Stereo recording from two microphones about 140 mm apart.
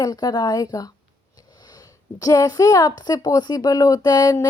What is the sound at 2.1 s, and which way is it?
Speech, 25° left (ahead or behind).